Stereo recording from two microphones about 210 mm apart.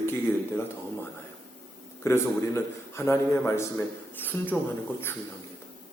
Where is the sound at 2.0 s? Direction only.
10° left (ahead or behind).